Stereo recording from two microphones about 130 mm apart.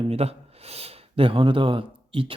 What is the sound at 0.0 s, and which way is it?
Speech, 50° right (ahead or behind).